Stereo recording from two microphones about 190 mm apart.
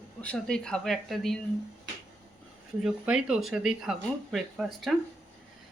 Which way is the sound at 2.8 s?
5° right (ahead or behind).